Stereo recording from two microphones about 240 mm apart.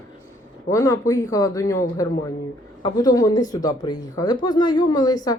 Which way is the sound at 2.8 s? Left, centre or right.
Centre.